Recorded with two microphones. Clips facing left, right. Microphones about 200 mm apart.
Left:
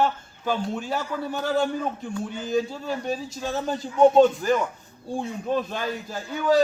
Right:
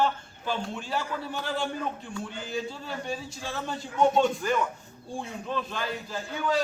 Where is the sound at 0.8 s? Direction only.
45° left (ahead or behind).